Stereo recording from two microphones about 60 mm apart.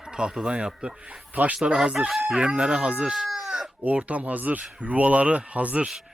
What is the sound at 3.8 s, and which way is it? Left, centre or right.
Speech, right.